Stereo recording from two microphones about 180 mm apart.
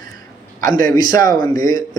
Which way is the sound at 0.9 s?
20° left (ahead or behind).